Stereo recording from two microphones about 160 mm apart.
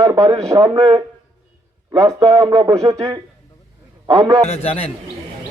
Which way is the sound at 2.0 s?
20° right (ahead or behind).